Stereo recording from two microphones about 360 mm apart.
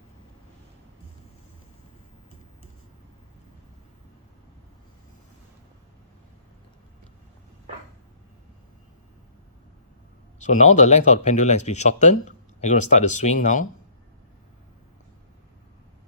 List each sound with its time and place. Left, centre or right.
10.4 s speech: centre